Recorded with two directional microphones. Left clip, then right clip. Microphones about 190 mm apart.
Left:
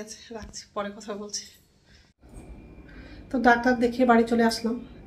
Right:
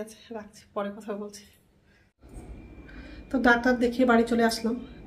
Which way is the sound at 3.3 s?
5° right (ahead or behind).